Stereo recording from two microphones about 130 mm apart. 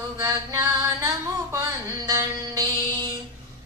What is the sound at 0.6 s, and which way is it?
Music, 25° right (ahead or behind).